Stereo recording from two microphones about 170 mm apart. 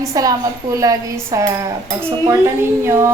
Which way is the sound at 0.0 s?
20° right (ahead or behind).